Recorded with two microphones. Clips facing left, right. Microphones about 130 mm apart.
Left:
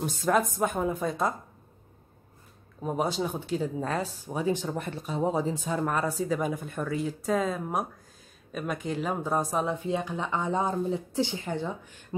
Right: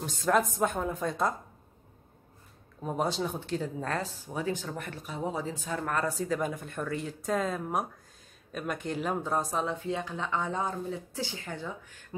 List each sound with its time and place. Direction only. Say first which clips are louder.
0.0 s speech: left 1 dB; 5° left (ahead or behind)
2.8 s speech: left 2 dB; 5° left (ahead or behind)
4.3 s speech: left 5 dB; 20° left (ahead or behind)